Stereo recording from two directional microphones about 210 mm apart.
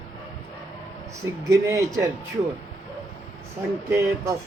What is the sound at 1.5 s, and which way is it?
Speech, 15° right (ahead or behind).